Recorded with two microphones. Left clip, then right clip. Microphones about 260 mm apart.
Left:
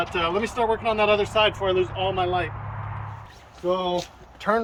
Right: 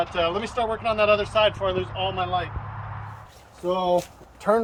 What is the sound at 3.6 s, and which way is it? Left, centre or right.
Speech, right.